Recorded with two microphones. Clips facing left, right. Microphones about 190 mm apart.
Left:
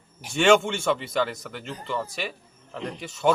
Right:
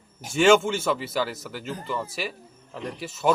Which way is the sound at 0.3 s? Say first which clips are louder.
Right 1 dB; 5° right (ahead or behind).